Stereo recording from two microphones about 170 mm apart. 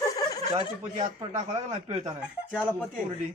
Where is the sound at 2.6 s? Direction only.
5° left (ahead or behind).